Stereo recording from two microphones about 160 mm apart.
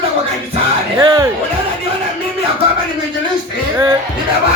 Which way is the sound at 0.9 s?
30° right (ahead or behind).